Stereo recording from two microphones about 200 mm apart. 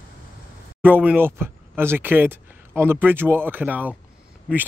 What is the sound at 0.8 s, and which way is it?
Speech, 10° right (ahead or behind).